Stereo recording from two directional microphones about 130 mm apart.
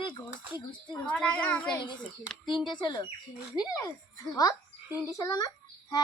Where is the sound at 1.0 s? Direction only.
10° left (ahead or behind).